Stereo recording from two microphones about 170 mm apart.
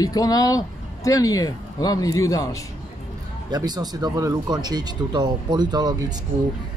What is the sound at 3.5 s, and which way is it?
Speech, 25° right (ahead or behind).